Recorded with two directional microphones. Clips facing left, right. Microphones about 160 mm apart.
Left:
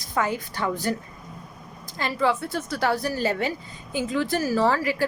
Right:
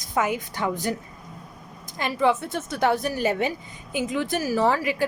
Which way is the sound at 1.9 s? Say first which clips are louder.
Right 2 dB; 15° right (ahead or behind).